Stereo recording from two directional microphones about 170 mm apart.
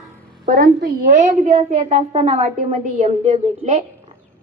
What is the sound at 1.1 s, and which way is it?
A woman's voice, 45° right (ahead or behind).